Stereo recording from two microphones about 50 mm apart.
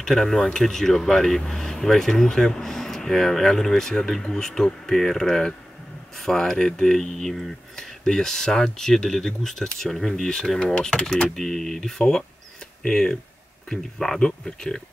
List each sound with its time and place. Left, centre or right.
0.0 s speech: centre